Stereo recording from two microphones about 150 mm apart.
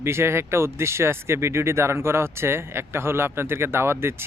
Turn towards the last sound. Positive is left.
turn(degrees=-15)  # may be behind; listen again after turning